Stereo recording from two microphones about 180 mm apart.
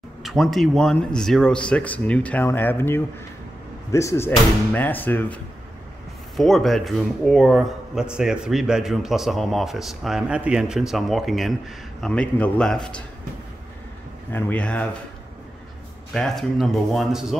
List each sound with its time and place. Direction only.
0.2 s speech: centre (ahead or behind)
14.3 s speech: 5° left (ahead or behind)
16.1 s speech: centre (ahead or behind)